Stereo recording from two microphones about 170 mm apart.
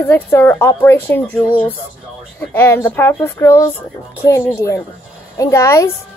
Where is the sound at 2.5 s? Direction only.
10° left (ahead or behind).